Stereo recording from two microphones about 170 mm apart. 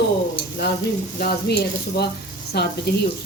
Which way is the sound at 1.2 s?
70° left (ahead or behind).